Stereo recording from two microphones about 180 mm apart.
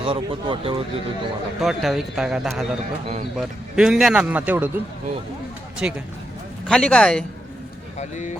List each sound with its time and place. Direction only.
0.0 s speech: 30° right (ahead or behind)
1.6 s speech: centre (ahead or behind)
5.8 s speech: 10° right (ahead or behind)
6.7 s speech: 5° left (ahead or behind)
7.9 s speech: 40° left (ahead or behind)